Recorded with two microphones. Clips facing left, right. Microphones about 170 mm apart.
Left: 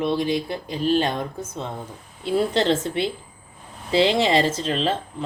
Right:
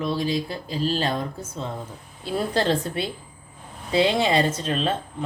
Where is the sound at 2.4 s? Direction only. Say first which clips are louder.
Left 2 dB; 25° left (ahead or behind).